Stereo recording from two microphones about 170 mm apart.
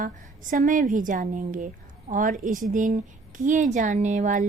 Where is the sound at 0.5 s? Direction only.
50° right (ahead or behind).